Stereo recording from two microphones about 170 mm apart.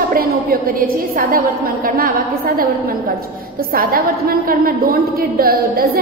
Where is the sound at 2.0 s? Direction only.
60° right (ahead or behind).